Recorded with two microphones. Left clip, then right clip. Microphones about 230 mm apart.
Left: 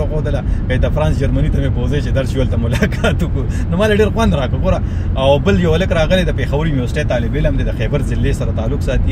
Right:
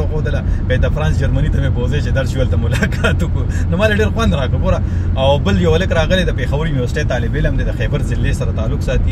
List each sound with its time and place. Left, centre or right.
0.7 s speech: centre
3.7 s speech: centre